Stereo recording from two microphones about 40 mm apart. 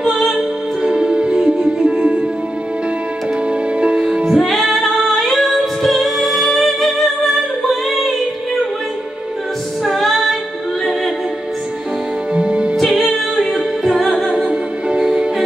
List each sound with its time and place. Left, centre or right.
0.4 s music: right
3.8 s music: right
4.5 s singing: centre
9.8 s music: centre
12.4 s music: right
12.9 s music: centre
14.3 s music: right